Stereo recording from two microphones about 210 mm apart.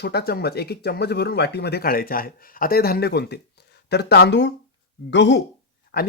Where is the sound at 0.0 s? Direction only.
50° left (ahead or behind).